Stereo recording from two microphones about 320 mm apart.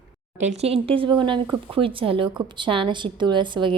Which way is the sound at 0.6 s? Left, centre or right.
Centre.